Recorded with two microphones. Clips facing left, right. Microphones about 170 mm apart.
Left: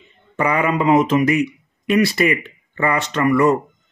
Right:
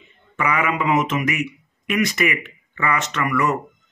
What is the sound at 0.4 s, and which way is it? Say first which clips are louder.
Speech: left 4 dB; 35° left (ahead or behind).